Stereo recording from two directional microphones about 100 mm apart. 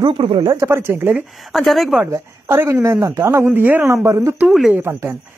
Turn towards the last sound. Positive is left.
turn(degrees=-25)  # may be behind; listen again after turning